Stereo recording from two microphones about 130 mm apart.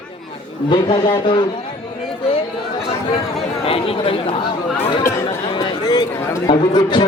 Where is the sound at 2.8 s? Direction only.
50° left (ahead or behind).